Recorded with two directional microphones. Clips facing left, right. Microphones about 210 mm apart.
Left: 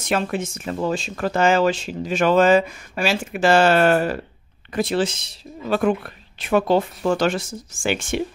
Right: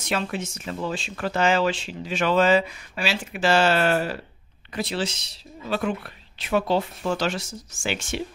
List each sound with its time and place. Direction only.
0.0 s speech: 50° left (ahead or behind)